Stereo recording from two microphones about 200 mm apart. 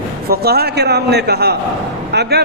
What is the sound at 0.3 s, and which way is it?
Speech, 50° right (ahead or behind).